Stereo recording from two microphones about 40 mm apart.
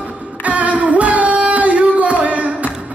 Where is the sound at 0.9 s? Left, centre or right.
Right.